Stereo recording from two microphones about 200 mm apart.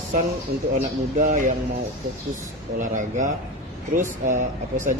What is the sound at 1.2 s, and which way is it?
Speech, 40° right (ahead or behind).